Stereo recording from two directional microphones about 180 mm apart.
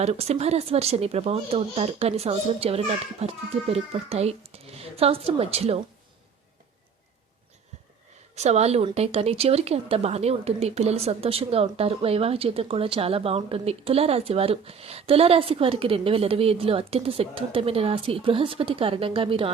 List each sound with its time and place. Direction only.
0.0 s speech: 35° right (ahead or behind)
8.4 s speech: 35° right (ahead or behind)